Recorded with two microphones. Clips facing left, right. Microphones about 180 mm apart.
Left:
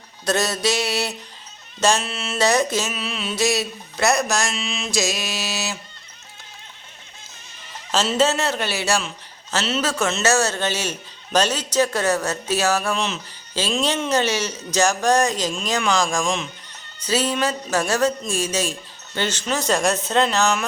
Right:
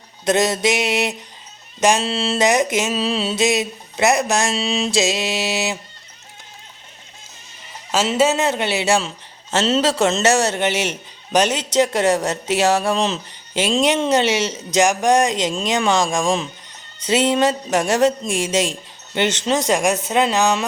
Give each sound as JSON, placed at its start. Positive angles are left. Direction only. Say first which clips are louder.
{"t": 0.3, "sound": "a man's voice", "louder": "right 4 dB", "side_deg": -20}
{"t": 2.5, "sound": "a man's voice", "louder": "right 2 dB", "side_deg": -20}
{"t": 2.9, "sound": "a man's voice", "louder": "right 8 dB", "side_deg": -35}
{"t": 4.5, "sound": "a man's voice", "louder": "right 6 dB", "side_deg": -35}
{"t": 7.9, "sound": "a man's voice", "louder": "right 2 dB", "side_deg": -15}
{"t": 9.0, "sound": "a sound", "louder": "right 3 dB", "side_deg": -25}
{"t": 9.6, "sound": "speech", "louder": "right 6 dB", "side_deg": -35}
{"t": 10.2, "sound": "a man's voice", "louder": "right 3 dB", "side_deg": -20}
{"t": 13.5, "sound": "a man's voice", "louder": "right 5 dB", "side_deg": -20}